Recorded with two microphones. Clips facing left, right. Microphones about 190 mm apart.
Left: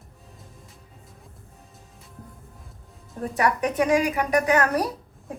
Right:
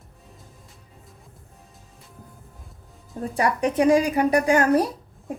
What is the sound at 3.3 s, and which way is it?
A woman's voice, 30° right (ahead or behind).